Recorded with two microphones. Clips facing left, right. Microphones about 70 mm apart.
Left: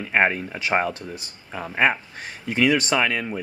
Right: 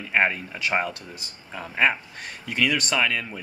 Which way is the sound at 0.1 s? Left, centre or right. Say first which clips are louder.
Left 2 dB; centre.